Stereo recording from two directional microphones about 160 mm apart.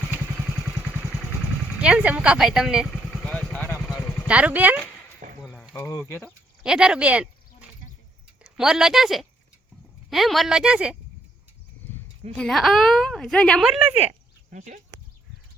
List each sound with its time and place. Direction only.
1.8 s vehicle: 10° right (ahead or behind); by 4.3 s 10° left (ahead or behind)
4.3 s speech: 10° right (ahead or behind)
5.2 s a sound: 60° right (ahead or behind)
5.7 s speech: 15° left (ahead or behind)
6.6 s a woman's voice: 5° right (ahead or behind)
8.5 s a woman's voice: 5° right (ahead or behind)
12.4 s a woman's voice: centre (ahead or behind)
14.5 s speech: 50° right (ahead or behind)